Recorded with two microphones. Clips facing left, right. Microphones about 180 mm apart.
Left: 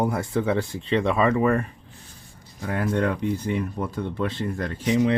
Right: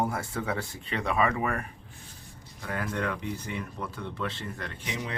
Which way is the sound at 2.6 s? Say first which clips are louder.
Left 8 dB; 35° left (ahead or behind).